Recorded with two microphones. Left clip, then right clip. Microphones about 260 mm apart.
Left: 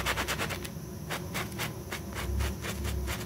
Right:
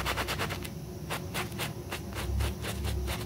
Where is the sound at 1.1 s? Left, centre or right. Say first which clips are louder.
Even; centre.